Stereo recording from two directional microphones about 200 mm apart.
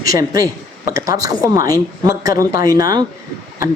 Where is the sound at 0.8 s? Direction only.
15° right (ahead or behind).